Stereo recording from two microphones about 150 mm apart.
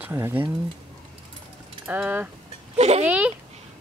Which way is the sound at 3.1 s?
10° right (ahead or behind).